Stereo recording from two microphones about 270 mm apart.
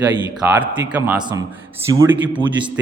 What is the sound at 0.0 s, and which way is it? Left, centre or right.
Speech, centre.